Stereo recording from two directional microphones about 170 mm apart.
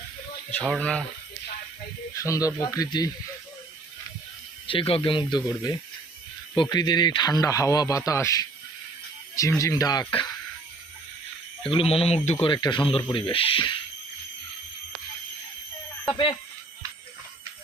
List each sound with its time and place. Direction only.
0.5 s speech: 5° left (ahead or behind)
2.2 s a man's voice: 20° left (ahead or behind)
4.6 s a man's voice: 30° left (ahead or behind)
11.6 s speech: 35° left (ahead or behind)
16.0 s speech: 30° left (ahead or behind)